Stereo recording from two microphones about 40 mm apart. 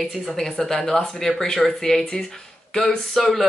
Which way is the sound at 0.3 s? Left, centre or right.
Centre.